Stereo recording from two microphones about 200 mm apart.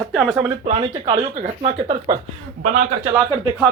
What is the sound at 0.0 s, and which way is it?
Speech, centre (ahead or behind).